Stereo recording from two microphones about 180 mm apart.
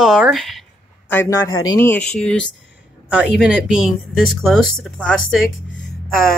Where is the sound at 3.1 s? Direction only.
5° right (ahead or behind).